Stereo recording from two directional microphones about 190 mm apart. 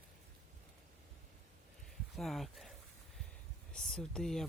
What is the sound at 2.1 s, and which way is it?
Speech, centre (ahead or behind).